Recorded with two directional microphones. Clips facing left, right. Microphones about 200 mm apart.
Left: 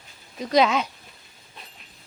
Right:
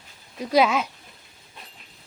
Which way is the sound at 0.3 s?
5° right (ahead or behind).